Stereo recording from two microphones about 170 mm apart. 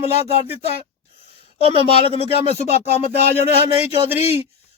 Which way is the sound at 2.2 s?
40° left (ahead or behind).